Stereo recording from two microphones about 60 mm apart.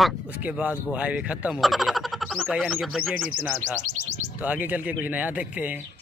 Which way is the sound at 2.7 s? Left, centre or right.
Centre.